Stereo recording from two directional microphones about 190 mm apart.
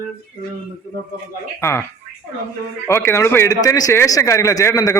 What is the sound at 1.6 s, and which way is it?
Speech, 15° left (ahead or behind).